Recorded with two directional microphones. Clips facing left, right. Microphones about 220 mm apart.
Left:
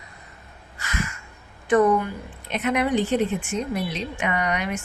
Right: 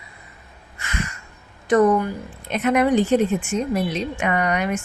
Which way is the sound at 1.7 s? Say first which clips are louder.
Right 2 dB; 40° right (ahead or behind).